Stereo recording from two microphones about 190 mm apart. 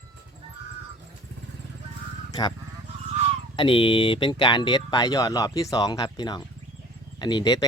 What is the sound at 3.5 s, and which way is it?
Speech, 30° left (ahead or behind).